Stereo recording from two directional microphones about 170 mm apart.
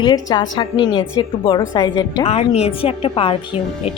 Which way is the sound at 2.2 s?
35° left (ahead or behind).